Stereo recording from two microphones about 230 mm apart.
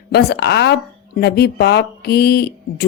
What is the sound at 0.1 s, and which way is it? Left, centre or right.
Speech, left.